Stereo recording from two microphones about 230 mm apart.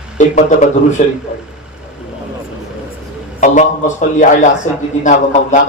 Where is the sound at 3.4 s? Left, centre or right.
Left.